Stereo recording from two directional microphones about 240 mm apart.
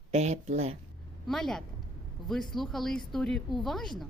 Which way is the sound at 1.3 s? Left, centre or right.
Centre.